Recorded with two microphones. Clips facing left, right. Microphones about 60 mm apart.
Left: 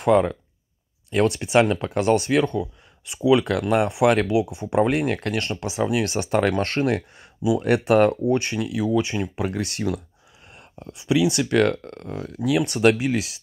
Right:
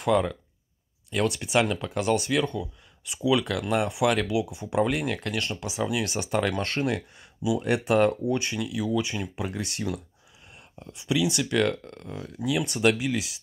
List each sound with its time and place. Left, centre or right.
0.0 s speech: left